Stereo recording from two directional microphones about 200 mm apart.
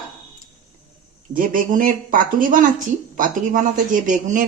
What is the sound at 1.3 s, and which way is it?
Speech, 45° right (ahead or behind).